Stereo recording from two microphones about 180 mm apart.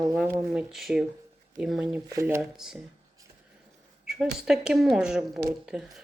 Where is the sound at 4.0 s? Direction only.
5° right (ahead or behind).